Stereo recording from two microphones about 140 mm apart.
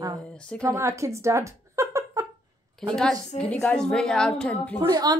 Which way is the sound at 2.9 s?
Centre (ahead or behind).